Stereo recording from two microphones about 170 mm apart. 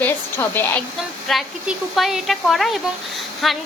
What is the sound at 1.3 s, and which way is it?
Speech, centre (ahead or behind).